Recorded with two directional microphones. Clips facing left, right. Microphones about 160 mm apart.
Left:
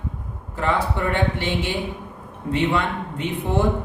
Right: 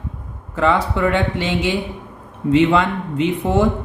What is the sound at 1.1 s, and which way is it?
A man's voice, 90° right.